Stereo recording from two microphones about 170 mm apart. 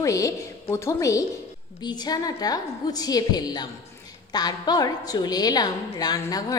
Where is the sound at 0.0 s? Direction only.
20° left (ahead or behind).